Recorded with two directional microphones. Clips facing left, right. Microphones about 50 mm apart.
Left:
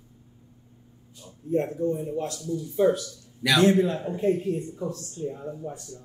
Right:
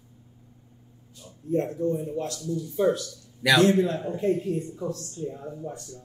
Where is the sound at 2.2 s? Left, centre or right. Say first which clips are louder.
Even; left.